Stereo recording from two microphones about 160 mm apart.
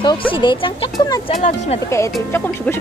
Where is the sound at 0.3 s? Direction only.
30° left (ahead or behind).